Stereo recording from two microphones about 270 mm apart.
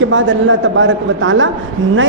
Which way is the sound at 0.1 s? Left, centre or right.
Right.